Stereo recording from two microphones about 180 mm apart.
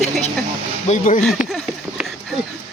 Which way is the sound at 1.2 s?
Centre (ahead or behind).